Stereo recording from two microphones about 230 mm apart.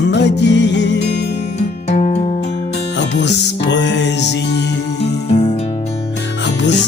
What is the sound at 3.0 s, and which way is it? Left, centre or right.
Music, left.